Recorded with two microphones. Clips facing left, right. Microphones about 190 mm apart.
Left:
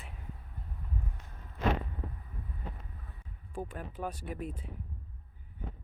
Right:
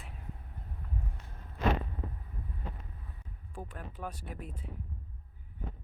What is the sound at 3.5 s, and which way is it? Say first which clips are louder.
Speech: left 5 dB; 5° left (ahead or behind).